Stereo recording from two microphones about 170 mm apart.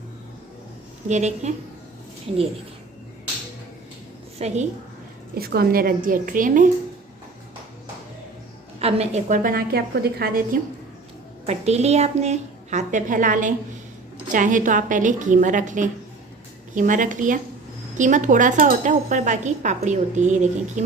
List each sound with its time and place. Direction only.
1.0 s a woman's voice: 40° right (ahead or behind)
4.4 s a woman's voice: 40° right (ahead or behind)
5.4 s speech: 65° right (ahead or behind)
8.8 s a woman's voice: 35° right (ahead or behind); by 10.6 s 60° right (ahead or behind)
11.4 s a woman's voice: 40° right (ahead or behind)